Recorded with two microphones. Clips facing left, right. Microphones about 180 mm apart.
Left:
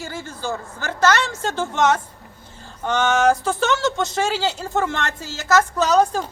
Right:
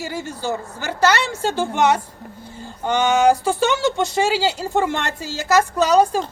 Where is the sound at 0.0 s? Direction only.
10° right (ahead or behind).